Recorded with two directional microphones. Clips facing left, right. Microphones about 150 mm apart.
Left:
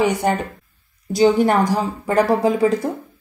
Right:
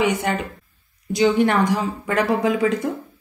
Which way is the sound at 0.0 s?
35° left (ahead or behind).